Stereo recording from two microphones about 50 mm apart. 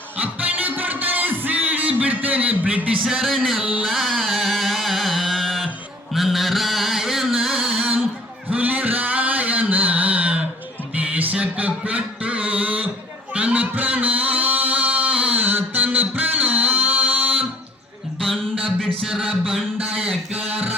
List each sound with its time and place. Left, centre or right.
0.2 s music: right
3.2 s music: centre
3.6 s music: right
3.8 s music: centre
6.1 s chant: centre
8.4 s a sound: right
10.9 s music: right
11.3 s a sound: right
13.3 s music: right
19.0 s a sound: centre